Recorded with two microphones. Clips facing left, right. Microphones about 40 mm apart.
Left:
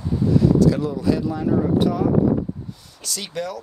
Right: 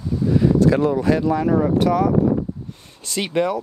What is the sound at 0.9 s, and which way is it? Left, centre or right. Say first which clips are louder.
Speech: right 4 dB; right.